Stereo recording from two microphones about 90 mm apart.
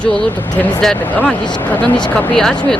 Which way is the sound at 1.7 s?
15° left (ahead or behind).